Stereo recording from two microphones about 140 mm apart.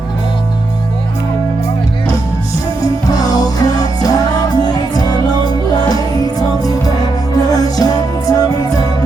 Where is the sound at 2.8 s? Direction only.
25° left (ahead or behind).